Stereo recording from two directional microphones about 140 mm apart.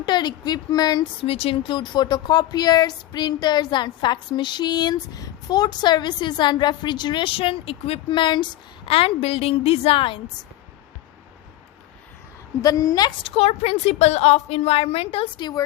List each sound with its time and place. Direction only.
0.0 s a woman's voice: 30° left (ahead or behind)
1.2 s a woman's voice: 45° left (ahead or behind)
12.6 s a woman's voice: 25° left (ahead or behind)
13.2 s a woman's voice: 45° left (ahead or behind)